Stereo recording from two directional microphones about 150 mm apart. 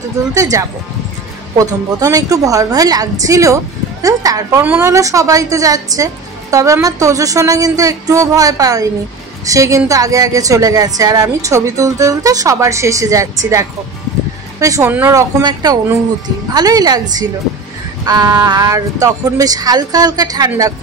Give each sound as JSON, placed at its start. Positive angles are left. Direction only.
{"t": 0.3, "sound": "a woman's voice", "side_deg": -20}
{"t": 18.0, "sound": "a woman's voice", "side_deg": -25}